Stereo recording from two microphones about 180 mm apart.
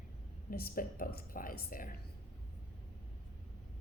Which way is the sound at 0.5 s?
55° left (ahead or behind).